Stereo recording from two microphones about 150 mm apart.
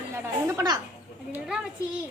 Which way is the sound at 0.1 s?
20° right (ahead or behind).